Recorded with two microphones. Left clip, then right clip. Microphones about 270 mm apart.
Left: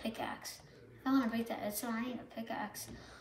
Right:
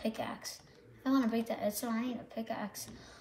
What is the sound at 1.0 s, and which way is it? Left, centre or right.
A woman's voice, right.